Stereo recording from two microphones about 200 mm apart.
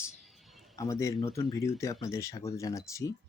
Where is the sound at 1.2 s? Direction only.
30° left (ahead or behind).